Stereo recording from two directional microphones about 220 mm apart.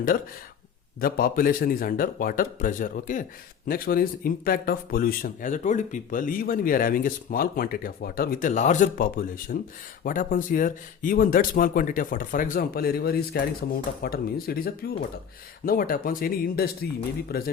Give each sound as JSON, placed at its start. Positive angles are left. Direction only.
{"t": 0.9, "sound": "speech", "side_deg": 40}